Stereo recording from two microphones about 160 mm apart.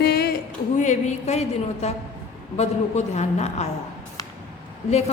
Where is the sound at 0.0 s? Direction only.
75° left (ahead or behind).